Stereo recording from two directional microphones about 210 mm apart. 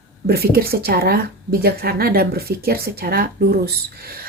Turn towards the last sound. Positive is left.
turn(degrees=-50)  # may be behind; listen again after turning